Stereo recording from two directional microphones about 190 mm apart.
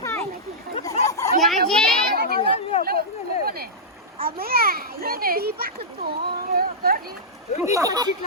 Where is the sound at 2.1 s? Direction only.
55° right (ahead or behind).